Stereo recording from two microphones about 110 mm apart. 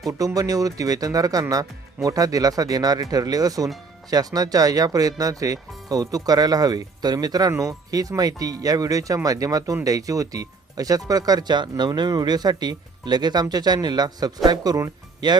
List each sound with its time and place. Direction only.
0.1 s speech: 30° right (ahead or behind)